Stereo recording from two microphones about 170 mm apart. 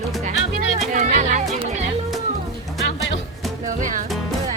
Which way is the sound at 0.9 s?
45° right (ahead or behind).